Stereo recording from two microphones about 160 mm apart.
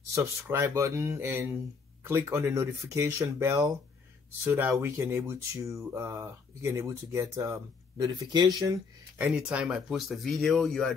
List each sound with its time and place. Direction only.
0.1 s speech: 15° right (ahead or behind)
9.2 s speech: 5° right (ahead or behind)